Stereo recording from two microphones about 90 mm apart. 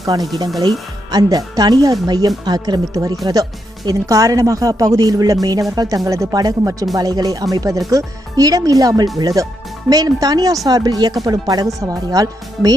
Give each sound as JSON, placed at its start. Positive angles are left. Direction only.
{"t": 0.0, "sound": "speech", "side_deg": -40}